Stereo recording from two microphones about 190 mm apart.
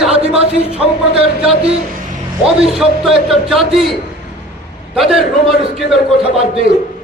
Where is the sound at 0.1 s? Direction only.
30° right (ahead or behind).